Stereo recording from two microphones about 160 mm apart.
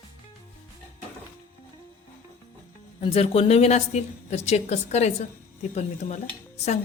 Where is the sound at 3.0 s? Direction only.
40° left (ahead or behind).